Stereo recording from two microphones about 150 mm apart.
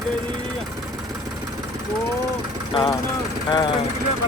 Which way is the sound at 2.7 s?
30° left (ahead or behind).